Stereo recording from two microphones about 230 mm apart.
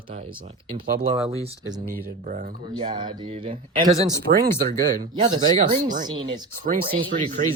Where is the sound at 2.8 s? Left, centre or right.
Centre.